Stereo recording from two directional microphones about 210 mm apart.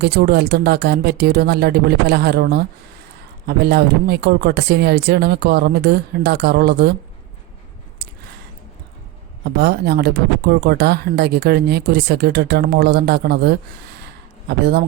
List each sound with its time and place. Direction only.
0.0 s speech: 50° right (ahead or behind)
9.6 s speech: 50° right (ahead or behind)
14.0 s a sound: 50° right (ahead or behind)